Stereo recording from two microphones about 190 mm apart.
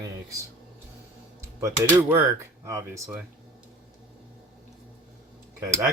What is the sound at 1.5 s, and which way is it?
Speech, 15° right (ahead or behind).